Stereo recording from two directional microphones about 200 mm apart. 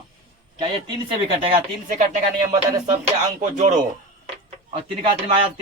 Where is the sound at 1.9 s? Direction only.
40° right (ahead or behind).